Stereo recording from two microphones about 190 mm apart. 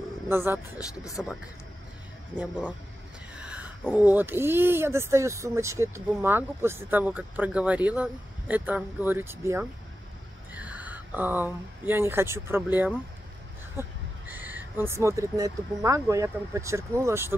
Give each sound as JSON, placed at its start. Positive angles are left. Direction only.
{"t": 0.3, "sound": "speech", "side_deg": -10}
{"t": 0.7, "sound": "speech", "side_deg": 15}
{"t": 3.4, "sound": "speech", "side_deg": -10}